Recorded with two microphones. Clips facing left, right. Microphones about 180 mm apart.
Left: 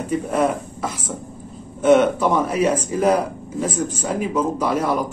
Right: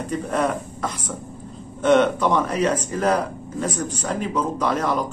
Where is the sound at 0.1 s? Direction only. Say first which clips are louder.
Left 3 dB; 5° left (ahead or behind).